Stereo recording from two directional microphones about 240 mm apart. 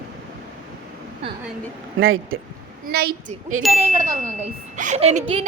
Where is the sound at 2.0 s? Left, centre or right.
Right.